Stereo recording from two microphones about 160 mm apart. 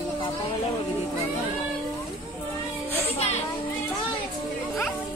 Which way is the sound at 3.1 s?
40° left (ahead or behind).